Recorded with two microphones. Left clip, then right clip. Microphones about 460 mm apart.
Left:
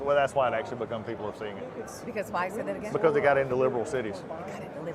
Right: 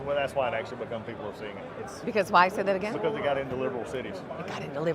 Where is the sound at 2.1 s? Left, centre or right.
Right.